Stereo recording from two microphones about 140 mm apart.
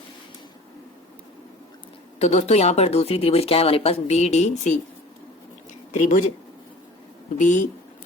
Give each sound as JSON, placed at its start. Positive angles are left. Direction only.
{"t": 2.1, "sound": "speech", "side_deg": 55}
{"t": 5.9, "sound": "speech", "side_deg": 60}
{"t": 7.3, "sound": "speech", "side_deg": 60}